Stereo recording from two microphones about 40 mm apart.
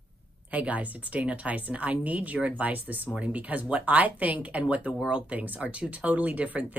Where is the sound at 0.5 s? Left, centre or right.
Right.